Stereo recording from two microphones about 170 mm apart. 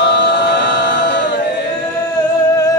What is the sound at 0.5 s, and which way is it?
Music, 90° left.